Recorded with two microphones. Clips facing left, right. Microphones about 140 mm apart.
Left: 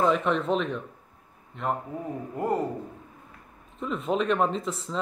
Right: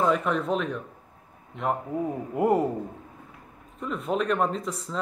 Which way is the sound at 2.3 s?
15° right (ahead or behind).